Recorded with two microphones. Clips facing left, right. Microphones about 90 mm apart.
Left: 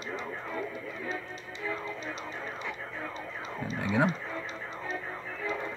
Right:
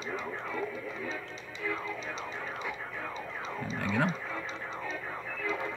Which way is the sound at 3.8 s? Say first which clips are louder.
Left 3 dB; 15° left (ahead or behind).